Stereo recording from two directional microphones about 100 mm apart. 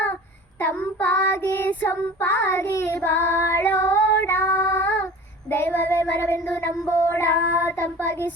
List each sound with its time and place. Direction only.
0.6 s child singing: 15° left (ahead or behind)